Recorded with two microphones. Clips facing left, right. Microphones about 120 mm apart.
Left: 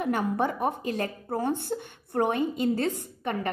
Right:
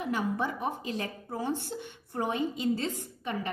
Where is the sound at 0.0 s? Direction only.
50° left (ahead or behind).